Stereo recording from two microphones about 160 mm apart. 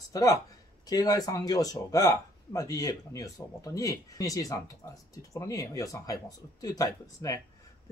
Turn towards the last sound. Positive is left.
turn(degrees=20)  # may be behind; listen again after turning